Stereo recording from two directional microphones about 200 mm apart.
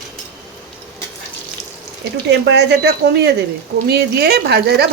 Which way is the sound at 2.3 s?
60° right (ahead or behind).